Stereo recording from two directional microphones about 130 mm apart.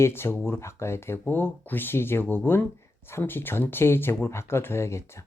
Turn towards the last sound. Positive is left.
turn(degrees=20)  # may be behind; listen again after turning